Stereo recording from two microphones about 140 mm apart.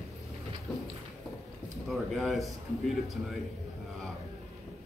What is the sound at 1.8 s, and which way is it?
Speech, centre (ahead or behind).